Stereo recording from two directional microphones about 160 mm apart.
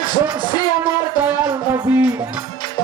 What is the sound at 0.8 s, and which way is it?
Music, 20° right (ahead or behind).